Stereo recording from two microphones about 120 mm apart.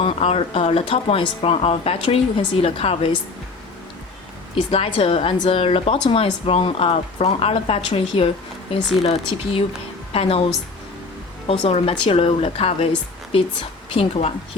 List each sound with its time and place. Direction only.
0.0 s speech: 55° left (ahead or behind)
4.5 s a woman's voice: 50° left (ahead or behind)
11.7 s a woman's voice: 60° left (ahead or behind)